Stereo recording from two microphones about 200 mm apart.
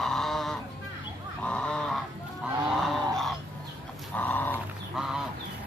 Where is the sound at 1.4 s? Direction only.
5° left (ahead or behind).